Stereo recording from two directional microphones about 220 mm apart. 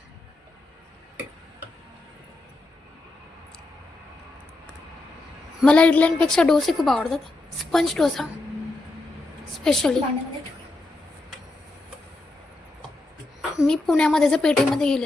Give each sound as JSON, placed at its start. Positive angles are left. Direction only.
{"t": 5.5, "sound": "a woman's voice", "side_deg": 5}
{"t": 9.6, "sound": "a woman's voice", "side_deg": 0}
{"t": 13.6, "sound": "a woman's voice", "side_deg": 0}